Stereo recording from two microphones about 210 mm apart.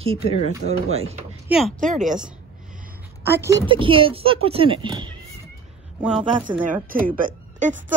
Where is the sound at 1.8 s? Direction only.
35° right (ahead or behind).